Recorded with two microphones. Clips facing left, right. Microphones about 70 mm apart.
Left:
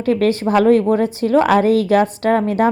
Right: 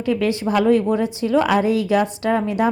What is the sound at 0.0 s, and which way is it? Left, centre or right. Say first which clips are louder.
A woman's voice: left 4 dB; left.